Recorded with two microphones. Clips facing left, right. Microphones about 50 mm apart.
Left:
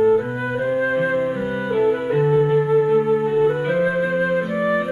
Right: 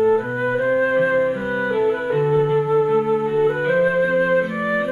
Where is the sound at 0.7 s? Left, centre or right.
Centre.